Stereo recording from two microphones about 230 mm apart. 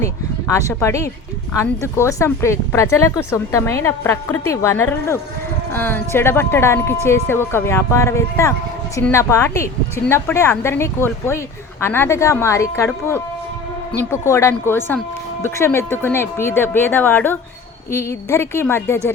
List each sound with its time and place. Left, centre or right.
0.0 s speech: centre